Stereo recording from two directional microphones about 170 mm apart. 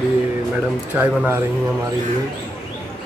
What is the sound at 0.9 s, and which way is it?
Speech, 10° right (ahead or behind).